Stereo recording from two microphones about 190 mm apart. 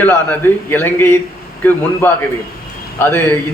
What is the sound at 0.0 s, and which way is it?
A man's voice, 10° left (ahead or behind).